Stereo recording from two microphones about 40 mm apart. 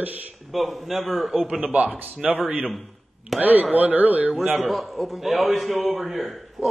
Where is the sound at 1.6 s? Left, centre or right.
Right.